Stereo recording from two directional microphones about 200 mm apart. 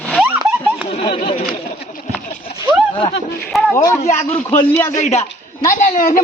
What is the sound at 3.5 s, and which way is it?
Speech, centre (ahead or behind).